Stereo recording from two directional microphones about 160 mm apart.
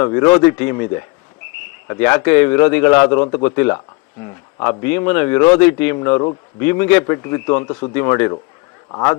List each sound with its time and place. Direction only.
0.0 s a man's voice: 15° left (ahead or behind)
4.2 s insect: 20° left (ahead or behind)
4.8 s a man's voice: 15° left (ahead or behind)